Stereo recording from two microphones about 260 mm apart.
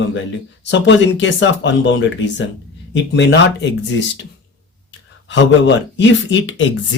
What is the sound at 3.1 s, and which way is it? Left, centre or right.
Speech, left.